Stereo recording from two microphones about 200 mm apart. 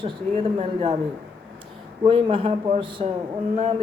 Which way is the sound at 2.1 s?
25° right (ahead or behind).